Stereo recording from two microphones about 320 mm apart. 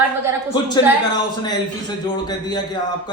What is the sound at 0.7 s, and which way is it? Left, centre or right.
A man's voice, centre.